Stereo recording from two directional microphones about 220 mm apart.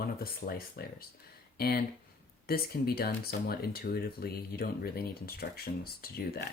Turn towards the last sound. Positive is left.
turn(degrees=45)  # may be behind; listen again after turning